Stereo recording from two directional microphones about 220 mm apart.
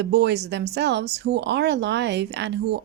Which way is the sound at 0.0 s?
50° right (ahead or behind).